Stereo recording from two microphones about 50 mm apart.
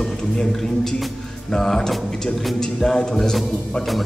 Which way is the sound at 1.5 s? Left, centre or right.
Centre.